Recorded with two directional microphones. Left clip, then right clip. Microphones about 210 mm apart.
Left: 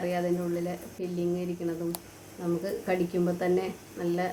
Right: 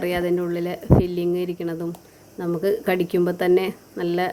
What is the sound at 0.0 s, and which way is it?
Speech, 40° right (ahead or behind).